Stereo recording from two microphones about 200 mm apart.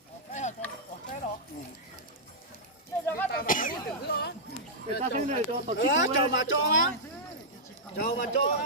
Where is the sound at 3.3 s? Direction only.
45° left (ahead or behind).